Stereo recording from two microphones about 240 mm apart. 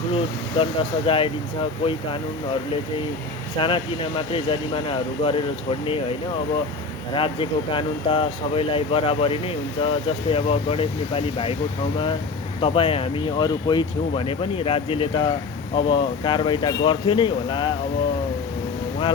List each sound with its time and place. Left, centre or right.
0.1 s speech: left
3.6 s speech: left
12.5 s speech: left